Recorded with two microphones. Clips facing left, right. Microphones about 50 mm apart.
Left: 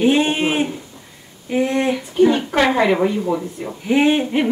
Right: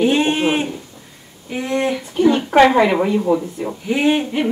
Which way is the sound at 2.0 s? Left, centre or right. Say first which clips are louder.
Left 1 dB; centre.